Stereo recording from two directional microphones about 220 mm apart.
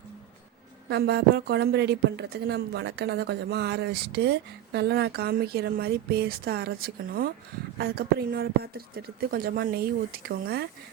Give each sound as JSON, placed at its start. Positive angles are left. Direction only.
{"t": 0.9, "sound": "a woman's voice", "side_deg": -45}